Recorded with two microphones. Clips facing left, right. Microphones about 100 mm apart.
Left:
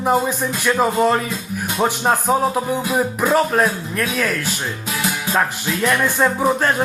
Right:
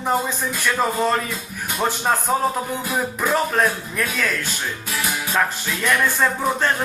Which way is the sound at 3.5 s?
5° left (ahead or behind).